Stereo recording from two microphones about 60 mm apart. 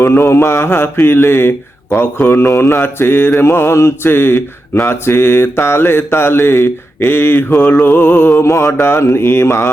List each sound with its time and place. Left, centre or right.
0.0 s mantra: left
2.4 s mantra: left
8.4 s mantra: left